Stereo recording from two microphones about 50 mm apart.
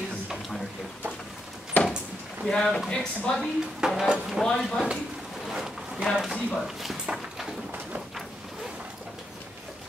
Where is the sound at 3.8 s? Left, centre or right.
Centre.